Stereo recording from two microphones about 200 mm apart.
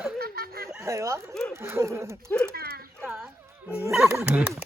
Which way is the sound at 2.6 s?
50° right (ahead or behind).